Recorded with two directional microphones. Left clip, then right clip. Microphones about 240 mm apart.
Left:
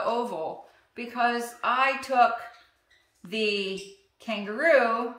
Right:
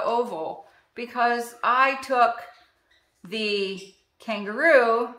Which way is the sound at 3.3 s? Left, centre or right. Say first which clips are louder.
Right 1 dB; centre.